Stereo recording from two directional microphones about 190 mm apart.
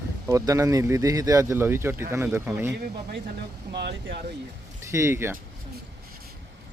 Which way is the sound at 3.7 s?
60° right (ahead or behind).